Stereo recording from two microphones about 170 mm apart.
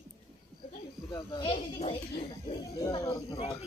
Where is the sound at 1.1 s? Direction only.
20° left (ahead or behind).